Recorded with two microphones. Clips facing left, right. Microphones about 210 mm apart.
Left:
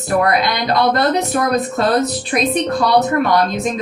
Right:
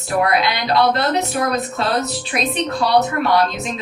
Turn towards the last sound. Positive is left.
turn(degrees=45)  # may be behind; listen again after turning